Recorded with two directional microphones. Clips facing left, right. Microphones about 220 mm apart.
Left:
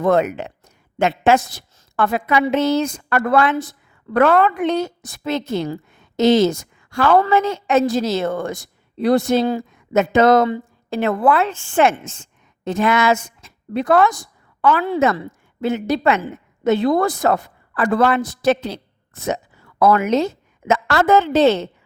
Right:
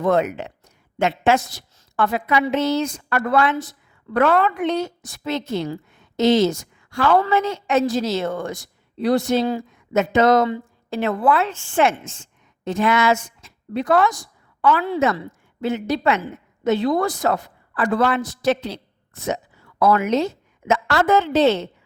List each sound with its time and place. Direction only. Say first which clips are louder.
0.0 s a woman's voice: left 2 dB; 50° left (ahead or behind)
19.8 s a woman's voice: left 2 dB; 50° left (ahead or behind)